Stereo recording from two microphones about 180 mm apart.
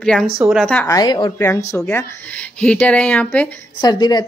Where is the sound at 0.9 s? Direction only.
20° left (ahead or behind).